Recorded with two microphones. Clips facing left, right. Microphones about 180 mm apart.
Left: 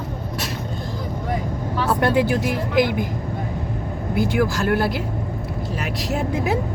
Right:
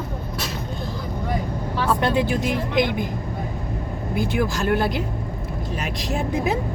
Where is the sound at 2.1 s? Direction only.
10° left (ahead or behind).